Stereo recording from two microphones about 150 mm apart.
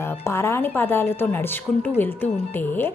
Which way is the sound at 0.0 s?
15° left (ahead or behind).